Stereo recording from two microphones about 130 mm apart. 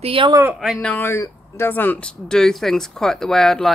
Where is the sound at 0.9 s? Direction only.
20° left (ahead or behind).